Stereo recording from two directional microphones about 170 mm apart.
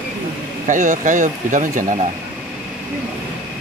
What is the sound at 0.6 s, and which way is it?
Speech, 50° right (ahead or behind).